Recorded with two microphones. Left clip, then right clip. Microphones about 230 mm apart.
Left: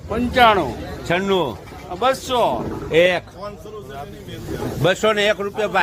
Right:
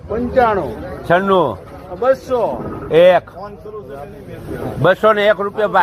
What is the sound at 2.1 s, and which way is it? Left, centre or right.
Speech, left.